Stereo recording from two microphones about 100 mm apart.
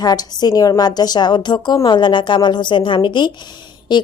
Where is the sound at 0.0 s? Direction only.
40° left (ahead or behind).